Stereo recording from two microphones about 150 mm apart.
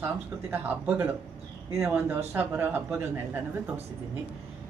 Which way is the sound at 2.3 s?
15° right (ahead or behind).